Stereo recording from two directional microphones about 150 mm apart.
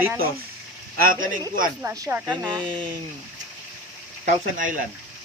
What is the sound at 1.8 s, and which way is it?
Speech, 20° right (ahead or behind).